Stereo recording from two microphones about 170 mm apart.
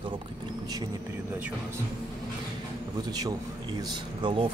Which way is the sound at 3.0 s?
25° right (ahead or behind).